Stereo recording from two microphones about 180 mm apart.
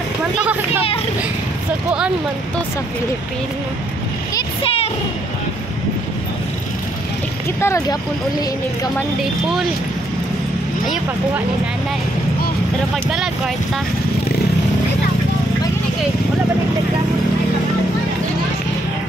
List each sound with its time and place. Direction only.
0.4 s a sound: 10° right (ahead or behind)
1.9 s speech: 5° right (ahead or behind)
4.4 s vehicle: 30° left (ahead or behind)
7.6 s speech: 15° left (ahead or behind)
8.9 s speech: centre (ahead or behind)
12.9 s speech: centre (ahead or behind)